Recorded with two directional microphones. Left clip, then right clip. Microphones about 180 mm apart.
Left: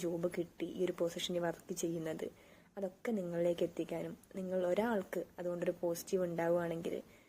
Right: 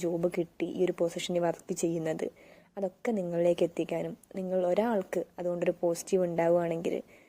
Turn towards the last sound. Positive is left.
turn(degrees=-40)  # may be behind; listen again after turning